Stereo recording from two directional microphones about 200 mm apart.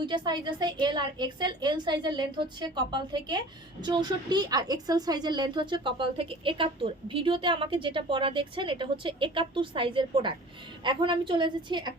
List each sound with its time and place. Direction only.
0.0 s a woman's voice: 20° right (ahead or behind)